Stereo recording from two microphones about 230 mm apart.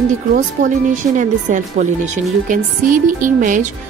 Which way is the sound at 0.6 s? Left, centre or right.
Right.